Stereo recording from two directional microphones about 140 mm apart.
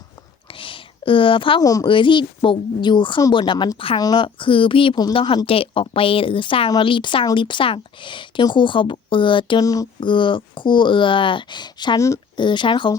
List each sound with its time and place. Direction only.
0.4 s a sound: 40° left (ahead or behind)
1.6 s speech: 25° left (ahead or behind)
1.9 s speech: 35° left (ahead or behind)
12.4 s speech: 35° left (ahead or behind)